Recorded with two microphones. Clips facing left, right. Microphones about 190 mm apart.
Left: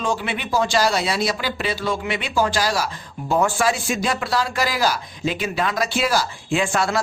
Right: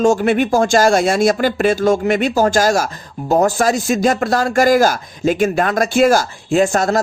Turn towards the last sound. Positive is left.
turn(degrees=-45)  # may be behind; listen again after turning